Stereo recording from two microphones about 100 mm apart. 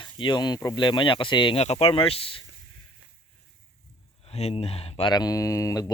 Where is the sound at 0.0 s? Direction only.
50° left (ahead or behind).